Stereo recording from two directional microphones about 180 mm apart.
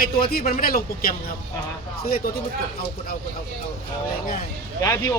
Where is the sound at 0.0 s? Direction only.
60° left (ahead or behind).